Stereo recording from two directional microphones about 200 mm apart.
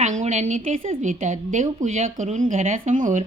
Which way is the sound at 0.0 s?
35° right (ahead or behind).